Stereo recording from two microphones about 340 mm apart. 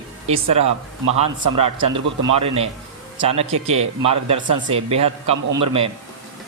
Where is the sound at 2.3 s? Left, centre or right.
Centre.